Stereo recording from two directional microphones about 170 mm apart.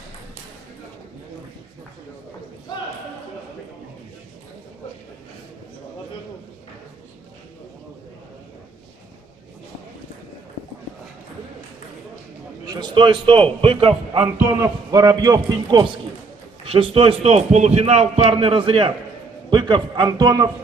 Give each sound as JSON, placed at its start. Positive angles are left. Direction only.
{"t": 12.6, "sound": "a man's voice", "side_deg": -25}
{"t": 14.6, "sound": "a man's voice", "side_deg": -20}
{"t": 16.6, "sound": "a man's voice", "side_deg": -35}